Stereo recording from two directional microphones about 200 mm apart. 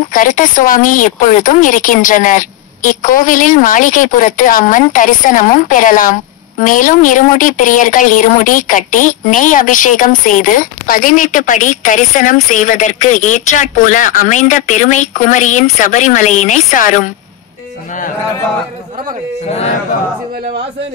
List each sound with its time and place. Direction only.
0.1 s speech: 40° left (ahead or behind)